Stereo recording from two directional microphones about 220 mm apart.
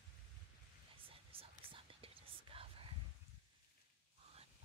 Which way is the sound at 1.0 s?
25° right (ahead or behind).